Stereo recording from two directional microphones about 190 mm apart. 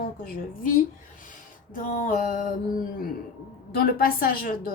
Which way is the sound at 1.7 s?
40° left (ahead or behind).